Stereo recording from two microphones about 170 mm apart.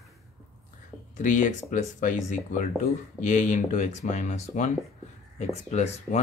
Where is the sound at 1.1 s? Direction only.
50° left (ahead or behind).